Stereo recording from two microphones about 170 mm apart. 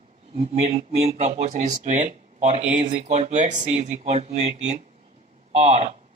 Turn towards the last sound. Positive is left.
turn(degrees=-40)  # may be behind; listen again after turning